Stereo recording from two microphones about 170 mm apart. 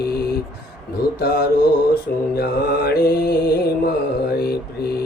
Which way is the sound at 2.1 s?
65° left (ahead or behind).